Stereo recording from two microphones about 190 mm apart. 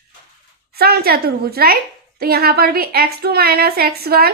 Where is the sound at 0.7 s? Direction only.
55° right (ahead or behind).